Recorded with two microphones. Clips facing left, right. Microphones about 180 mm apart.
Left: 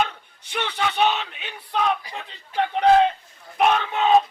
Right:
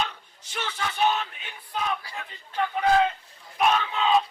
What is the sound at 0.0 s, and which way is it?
Music, 60° left (ahead or behind).